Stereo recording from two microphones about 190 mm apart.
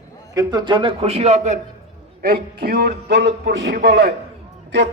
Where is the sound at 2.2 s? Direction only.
50° right (ahead or behind).